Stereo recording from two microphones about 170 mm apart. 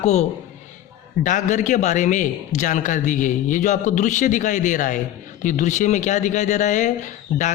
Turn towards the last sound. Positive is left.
turn(degrees=45)  # may be behind; listen again after turning